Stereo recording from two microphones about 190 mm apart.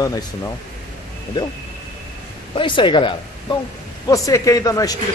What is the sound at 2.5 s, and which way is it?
Speech, 25° left (ahead or behind).